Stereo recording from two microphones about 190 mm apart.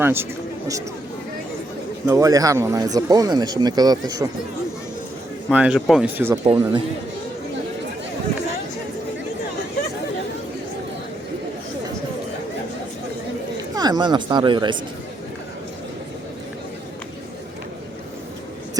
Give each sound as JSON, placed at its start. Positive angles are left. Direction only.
{"t": 0.0, "sound": "speech", "side_deg": -10}
{"t": 2.0, "sound": "speech", "side_deg": -15}
{"t": 5.5, "sound": "speech", "side_deg": -5}
{"t": 6.4, "sound": "speech", "side_deg": -25}
{"t": 13.6, "sound": "speech", "side_deg": -20}